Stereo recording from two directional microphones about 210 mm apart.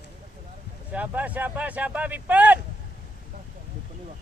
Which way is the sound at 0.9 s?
5° right (ahead or behind).